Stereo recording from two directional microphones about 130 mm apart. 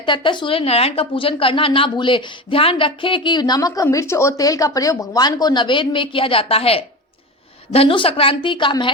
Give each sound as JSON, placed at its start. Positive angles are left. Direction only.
{"t": 0.0, "sound": "speech", "side_deg": 40}